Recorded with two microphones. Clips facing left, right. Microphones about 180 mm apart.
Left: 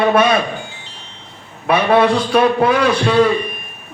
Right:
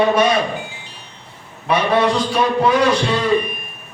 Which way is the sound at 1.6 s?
60° left (ahead or behind).